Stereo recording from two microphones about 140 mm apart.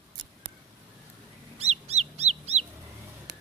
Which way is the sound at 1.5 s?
50° right (ahead or behind).